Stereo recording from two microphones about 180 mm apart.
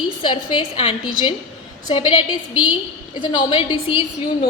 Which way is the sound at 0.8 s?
35° left (ahead or behind).